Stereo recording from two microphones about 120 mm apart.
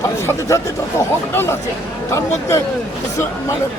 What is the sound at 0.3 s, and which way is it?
Speech, 25° left (ahead or behind).